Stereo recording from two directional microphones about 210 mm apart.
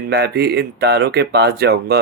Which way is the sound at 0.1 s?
50° right (ahead or behind).